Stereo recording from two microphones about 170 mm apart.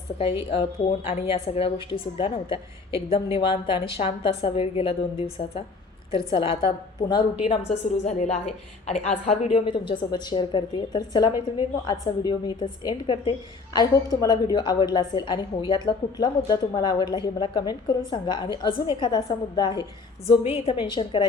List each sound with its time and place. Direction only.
0.2 s a woman's voice: 30° left (ahead or behind)
8.0 s a woman's voice: 40° left (ahead or behind); by 19.8 s 25° left (ahead or behind)
20.2 s a woman's voice: 35° left (ahead or behind)